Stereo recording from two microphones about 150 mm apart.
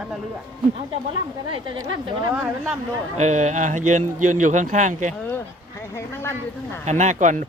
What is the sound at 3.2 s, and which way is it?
Speech, 50° right (ahead or behind).